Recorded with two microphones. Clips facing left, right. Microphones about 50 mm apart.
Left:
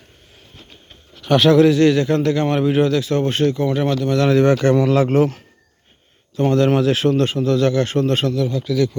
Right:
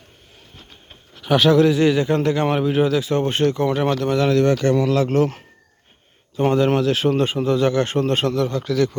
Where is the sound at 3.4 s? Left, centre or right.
Right.